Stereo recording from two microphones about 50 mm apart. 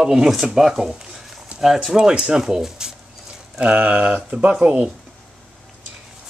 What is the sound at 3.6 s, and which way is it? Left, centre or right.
Speech, right.